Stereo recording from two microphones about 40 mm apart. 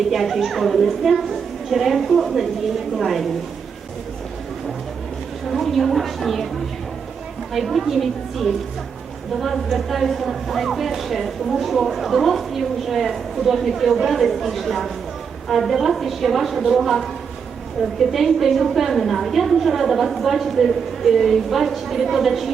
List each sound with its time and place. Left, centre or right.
0.1 s a woman's voice: centre
5.5 s a woman's voice: centre
7.5 s a woman's voice: centre